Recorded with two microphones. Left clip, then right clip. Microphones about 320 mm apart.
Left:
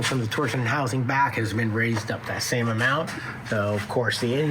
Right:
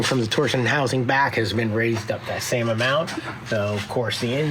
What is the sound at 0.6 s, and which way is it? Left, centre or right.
Speech, right.